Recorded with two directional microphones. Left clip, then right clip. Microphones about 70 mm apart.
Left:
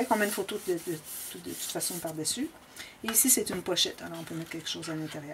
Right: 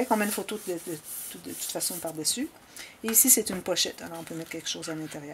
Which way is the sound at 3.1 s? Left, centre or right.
Right.